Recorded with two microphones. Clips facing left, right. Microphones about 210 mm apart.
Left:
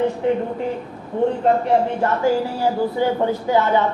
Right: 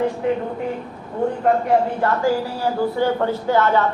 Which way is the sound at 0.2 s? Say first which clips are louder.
Left 2 dB; 25° left (ahead or behind).